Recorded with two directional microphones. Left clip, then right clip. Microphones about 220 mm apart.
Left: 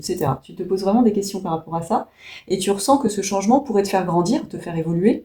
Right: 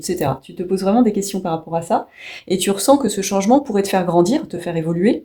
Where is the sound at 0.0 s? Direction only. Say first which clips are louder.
Right 2 dB; 35° right (ahead or behind).